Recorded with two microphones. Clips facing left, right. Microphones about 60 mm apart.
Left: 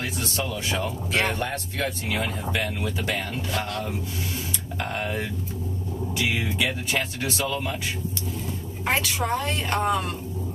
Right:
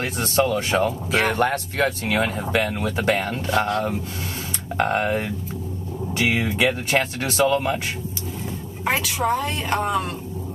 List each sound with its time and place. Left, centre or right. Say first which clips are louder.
0.0 s speech: right 8 dB; right
1.2 s speech: right 6 dB; right
4.7 s speech: right 8 dB; right
8.8 s a woman's voice: right 3 dB; centre